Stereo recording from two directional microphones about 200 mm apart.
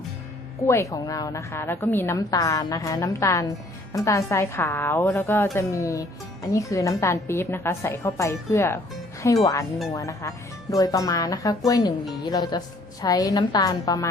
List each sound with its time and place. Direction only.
0.6 s speech: 15° left (ahead or behind)